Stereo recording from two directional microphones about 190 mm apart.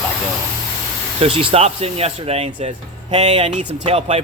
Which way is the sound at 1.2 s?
30° right (ahead or behind).